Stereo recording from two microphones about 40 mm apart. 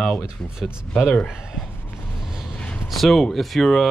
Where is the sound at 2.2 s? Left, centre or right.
Centre.